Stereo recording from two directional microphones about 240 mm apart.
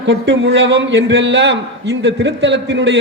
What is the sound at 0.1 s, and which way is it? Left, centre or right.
A man's voice, right.